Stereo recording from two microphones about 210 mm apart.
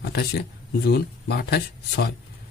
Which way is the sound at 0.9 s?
50° left (ahead or behind).